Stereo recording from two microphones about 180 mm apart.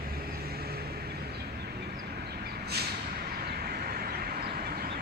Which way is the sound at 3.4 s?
60° right (ahead or behind).